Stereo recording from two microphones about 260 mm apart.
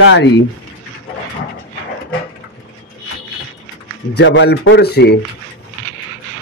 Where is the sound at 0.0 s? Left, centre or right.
Left.